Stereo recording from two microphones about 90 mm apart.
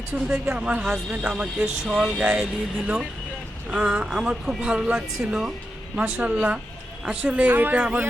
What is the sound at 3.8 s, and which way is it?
Speech, 10° right (ahead or behind).